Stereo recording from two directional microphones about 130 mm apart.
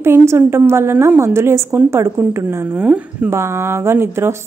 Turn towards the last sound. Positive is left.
turn(degrees=-20)  # may be behind; listen again after turning